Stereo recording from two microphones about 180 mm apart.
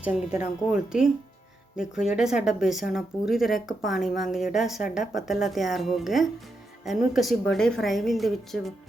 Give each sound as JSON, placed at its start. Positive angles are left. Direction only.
{"t": 0.0, "sound": "speech", "side_deg": -10}